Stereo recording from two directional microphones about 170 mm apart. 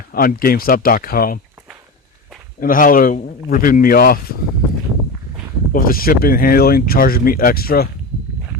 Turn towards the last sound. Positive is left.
turn(degrees=65)  # may be behind; listen again after turning